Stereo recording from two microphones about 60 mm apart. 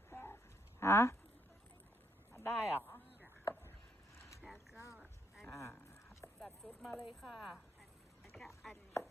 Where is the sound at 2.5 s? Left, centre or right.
Left.